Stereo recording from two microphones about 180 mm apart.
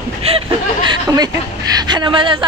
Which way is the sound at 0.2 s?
35° right (ahead or behind).